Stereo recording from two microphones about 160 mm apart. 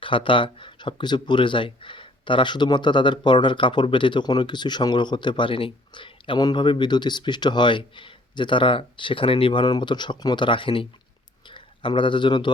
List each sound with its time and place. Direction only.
0.0 s speech: 30° left (ahead or behind)